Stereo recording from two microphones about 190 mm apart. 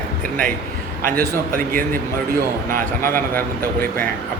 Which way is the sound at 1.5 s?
45° right (ahead or behind).